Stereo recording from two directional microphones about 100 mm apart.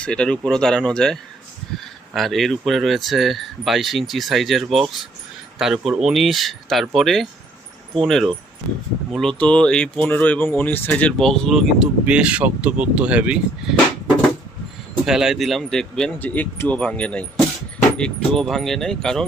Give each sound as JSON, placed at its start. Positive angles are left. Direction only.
{"t": 0.0, "sound": "speech", "side_deg": 10}
{"t": 11.2, "sound": "speech", "side_deg": 5}
{"t": 12.0, "sound": "speech", "side_deg": -10}
{"t": 15.0, "sound": "speech", "side_deg": -5}
{"t": 16.1, "sound": "speech", "side_deg": 15}